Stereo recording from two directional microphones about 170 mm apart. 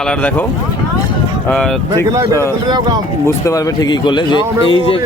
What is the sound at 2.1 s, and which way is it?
Speech, 20° right (ahead or behind).